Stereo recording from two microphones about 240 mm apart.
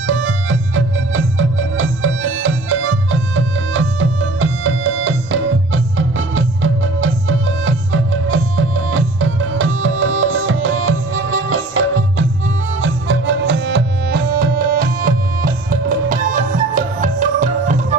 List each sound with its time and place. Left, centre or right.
0.0 s music: right